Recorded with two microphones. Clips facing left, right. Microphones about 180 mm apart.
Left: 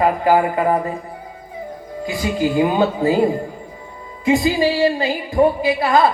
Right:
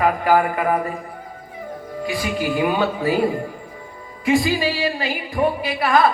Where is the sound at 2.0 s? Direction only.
25° left (ahead or behind).